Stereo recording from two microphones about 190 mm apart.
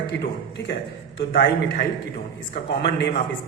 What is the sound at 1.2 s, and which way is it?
A man's voice, 60° left (ahead or behind).